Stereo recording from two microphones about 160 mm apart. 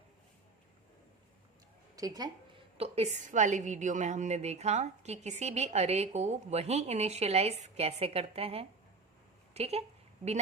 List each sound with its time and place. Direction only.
2.0 s speech: 25° right (ahead or behind)
2.7 s a woman's voice: 40° right (ahead or behind)